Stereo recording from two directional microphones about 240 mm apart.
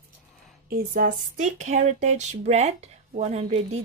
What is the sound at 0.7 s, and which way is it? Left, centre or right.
Speech, right.